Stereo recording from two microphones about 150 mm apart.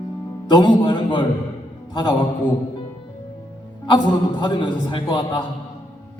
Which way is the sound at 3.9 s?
30° left (ahead or behind).